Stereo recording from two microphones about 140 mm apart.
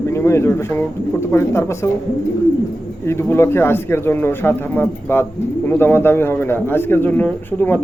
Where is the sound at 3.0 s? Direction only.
20° left (ahead or behind).